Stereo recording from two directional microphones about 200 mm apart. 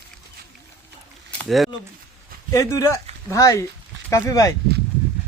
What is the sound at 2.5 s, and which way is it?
Speech, 15° left (ahead or behind).